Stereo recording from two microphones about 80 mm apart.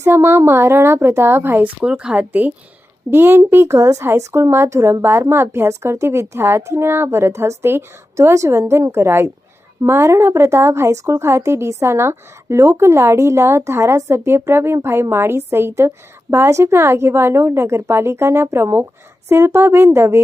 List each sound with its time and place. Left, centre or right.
0.0 s a woman's voice: right; by 2.2 s centre
3.1 s speech: right